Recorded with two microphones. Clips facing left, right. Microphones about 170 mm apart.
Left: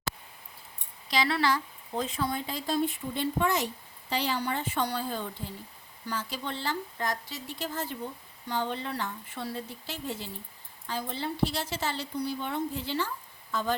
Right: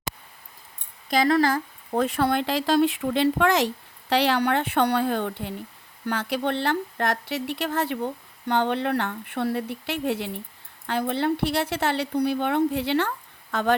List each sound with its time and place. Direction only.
1.1 s speech: 45° right (ahead or behind); by 3.7 s 90° right
4.1 s speech: 80° right